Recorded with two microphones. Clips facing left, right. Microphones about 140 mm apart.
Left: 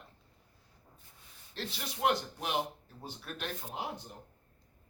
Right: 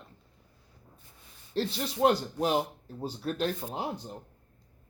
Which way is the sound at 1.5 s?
35° right (ahead or behind).